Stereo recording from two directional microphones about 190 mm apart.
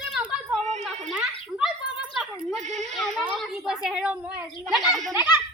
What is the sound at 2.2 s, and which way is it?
Bleat, centre (ahead or behind).